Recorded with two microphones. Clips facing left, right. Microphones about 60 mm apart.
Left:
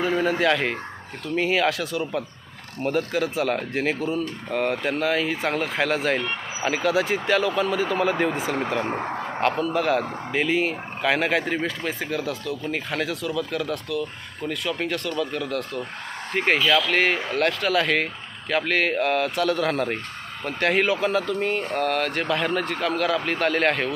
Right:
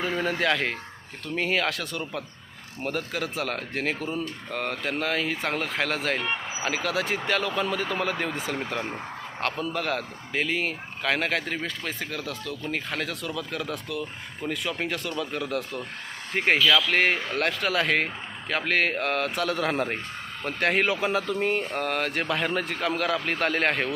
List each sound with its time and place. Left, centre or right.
0.0 s speech: centre
8.8 s speech: left
9.7 s speech: centre